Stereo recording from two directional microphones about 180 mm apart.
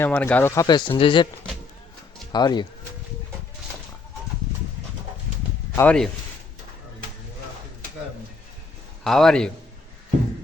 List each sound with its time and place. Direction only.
0.0 s speech: 10° left (ahead or behind); by 1.3 s 30° left (ahead or behind)
2.3 s speech: 25° left (ahead or behind)
5.7 s speech: 10° left (ahead or behind)
9.0 s a man's voice: centre (ahead or behind)